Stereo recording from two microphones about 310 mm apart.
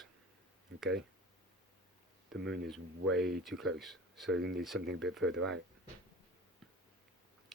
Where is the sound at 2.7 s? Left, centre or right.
Centre.